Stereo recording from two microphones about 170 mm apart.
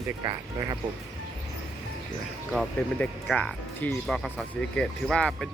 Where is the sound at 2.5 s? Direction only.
Centre (ahead or behind).